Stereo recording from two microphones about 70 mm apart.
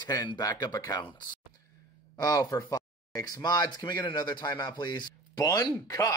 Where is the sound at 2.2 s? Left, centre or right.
Left.